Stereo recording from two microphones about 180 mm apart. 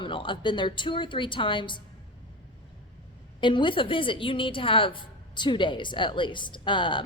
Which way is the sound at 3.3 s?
25° left (ahead or behind).